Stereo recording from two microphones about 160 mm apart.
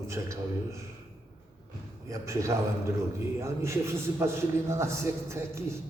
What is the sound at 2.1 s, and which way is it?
A man's voice, 20° right (ahead or behind).